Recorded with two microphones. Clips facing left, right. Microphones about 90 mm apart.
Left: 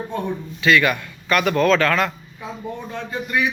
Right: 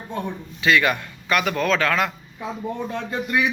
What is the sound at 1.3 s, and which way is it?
Speech, 5° right (ahead or behind).